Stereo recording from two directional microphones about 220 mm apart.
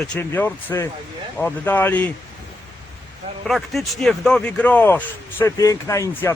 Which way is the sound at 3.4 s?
Centre (ahead or behind).